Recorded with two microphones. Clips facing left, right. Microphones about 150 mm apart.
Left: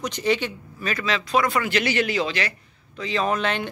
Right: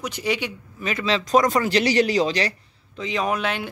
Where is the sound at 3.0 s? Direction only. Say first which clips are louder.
Even; 15° right (ahead or behind).